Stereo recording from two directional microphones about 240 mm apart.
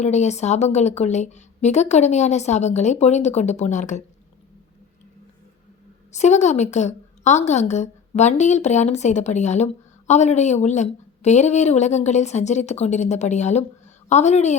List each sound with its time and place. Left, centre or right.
0.0 s speech: left
6.1 s speech: left